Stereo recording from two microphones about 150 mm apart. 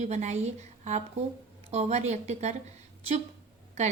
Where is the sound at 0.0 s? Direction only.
50° right (ahead or behind).